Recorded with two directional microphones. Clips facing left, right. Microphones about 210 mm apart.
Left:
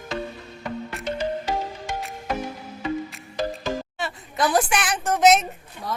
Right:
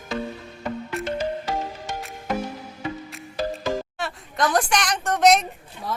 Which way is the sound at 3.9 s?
5° left (ahead or behind).